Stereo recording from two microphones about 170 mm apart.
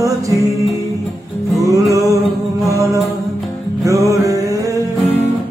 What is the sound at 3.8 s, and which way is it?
Music, 20° right (ahead or behind).